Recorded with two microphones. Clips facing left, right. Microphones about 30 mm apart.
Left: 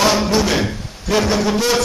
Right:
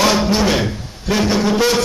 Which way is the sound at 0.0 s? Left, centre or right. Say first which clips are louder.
Right 1 dB; centre.